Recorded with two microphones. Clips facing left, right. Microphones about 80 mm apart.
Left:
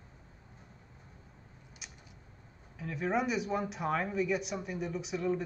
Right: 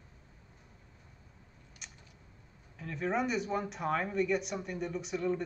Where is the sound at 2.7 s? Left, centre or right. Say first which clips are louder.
Left 1 dB; centre.